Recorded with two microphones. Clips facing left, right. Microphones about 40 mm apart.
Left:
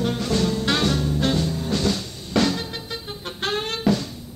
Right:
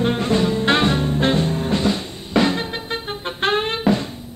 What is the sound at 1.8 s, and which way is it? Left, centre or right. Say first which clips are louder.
Music: right 3 dB; right.